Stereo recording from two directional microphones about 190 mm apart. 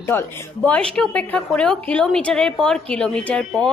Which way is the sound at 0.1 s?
10° left (ahead or behind).